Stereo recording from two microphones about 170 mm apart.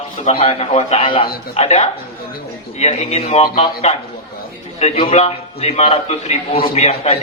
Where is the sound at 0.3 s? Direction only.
35° left (ahead or behind).